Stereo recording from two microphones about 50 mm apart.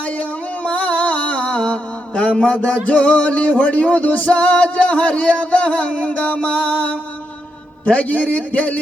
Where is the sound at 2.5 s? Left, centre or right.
Left.